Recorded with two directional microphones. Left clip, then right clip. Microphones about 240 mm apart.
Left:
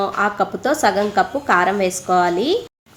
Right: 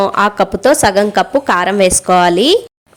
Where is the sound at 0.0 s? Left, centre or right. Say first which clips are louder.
Right 7 dB; right.